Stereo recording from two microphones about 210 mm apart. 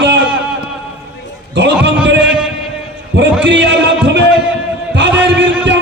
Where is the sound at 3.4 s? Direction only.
60° right (ahead or behind).